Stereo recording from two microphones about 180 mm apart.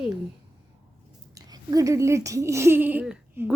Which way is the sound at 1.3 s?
20° right (ahead or behind).